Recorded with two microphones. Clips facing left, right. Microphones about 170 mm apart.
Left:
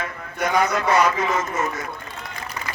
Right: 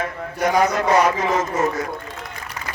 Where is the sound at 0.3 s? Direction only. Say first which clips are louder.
Right 3 dB; 30° right (ahead or behind).